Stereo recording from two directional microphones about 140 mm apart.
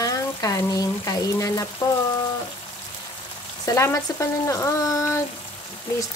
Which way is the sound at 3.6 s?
20° left (ahead or behind).